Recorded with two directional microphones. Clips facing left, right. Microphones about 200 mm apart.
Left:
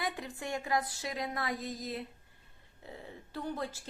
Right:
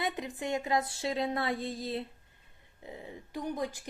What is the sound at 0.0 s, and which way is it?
Speech, 20° right (ahead or behind).